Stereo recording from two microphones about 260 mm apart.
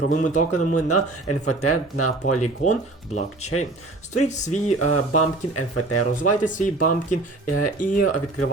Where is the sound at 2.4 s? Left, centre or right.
Left.